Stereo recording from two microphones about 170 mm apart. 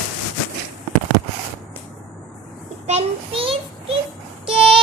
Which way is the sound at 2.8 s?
35° right (ahead or behind).